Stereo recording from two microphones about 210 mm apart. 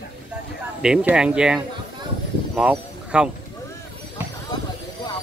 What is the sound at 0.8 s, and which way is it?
Speech, 5° right (ahead or behind).